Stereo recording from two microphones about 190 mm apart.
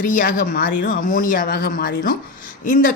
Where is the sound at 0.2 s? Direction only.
45° left (ahead or behind).